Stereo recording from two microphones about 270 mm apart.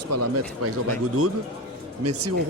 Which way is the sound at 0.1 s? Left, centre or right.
Right.